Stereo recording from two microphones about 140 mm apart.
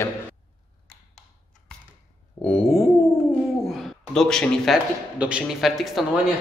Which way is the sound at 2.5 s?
45° left (ahead or behind).